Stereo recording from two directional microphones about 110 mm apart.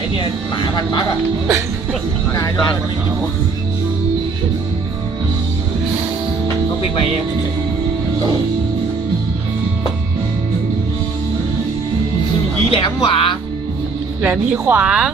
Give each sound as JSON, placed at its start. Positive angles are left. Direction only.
{"t": 0.2, "sound": "speech", "side_deg": 40}
{"t": 12.7, "sound": "speech", "side_deg": 55}
{"t": 14.2, "sound": "speech", "side_deg": -10}